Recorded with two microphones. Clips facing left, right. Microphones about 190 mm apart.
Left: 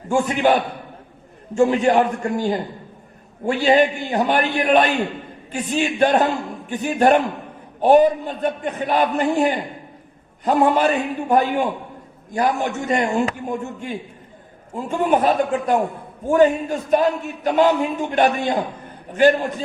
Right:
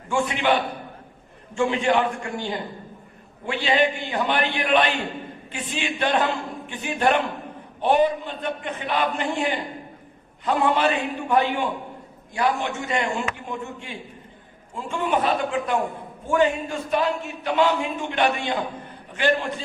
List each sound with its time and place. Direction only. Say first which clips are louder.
0.1 s a man's voice: left 5 dB; 40° left (ahead or behind)
1.5 s a man's voice: left 5 dB; 40° left (ahead or behind)